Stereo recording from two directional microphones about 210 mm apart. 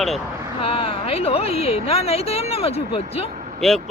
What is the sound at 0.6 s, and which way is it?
A woman's voice, 25° left (ahead or behind).